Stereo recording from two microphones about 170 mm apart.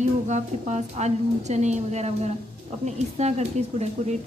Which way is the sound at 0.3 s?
40° right (ahead or behind).